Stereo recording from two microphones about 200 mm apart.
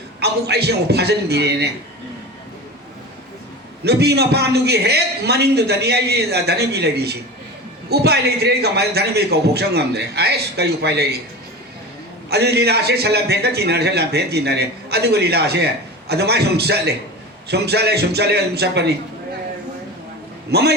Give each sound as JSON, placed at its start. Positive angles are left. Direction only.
{"t": 0.2, "sound": "a man's voice", "side_deg": -55}
{"t": 3.8, "sound": "a man's voice", "side_deg": -55}
{"t": 12.3, "sound": "a man's voice", "side_deg": -55}
{"t": 20.5, "sound": "a man's voice", "side_deg": -55}